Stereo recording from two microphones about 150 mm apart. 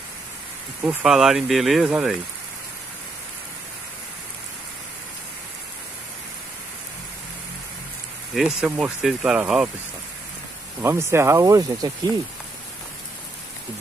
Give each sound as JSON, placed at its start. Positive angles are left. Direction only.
{"t": 0.8, "sound": "speech", "side_deg": -5}
{"t": 8.4, "sound": "speech", "side_deg": -5}
{"t": 10.8, "sound": "speech", "side_deg": -15}